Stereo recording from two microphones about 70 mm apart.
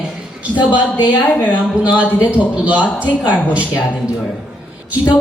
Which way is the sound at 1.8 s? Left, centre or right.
Right.